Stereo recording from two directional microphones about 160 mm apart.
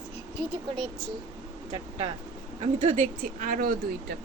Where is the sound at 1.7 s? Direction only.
35° right (ahead or behind).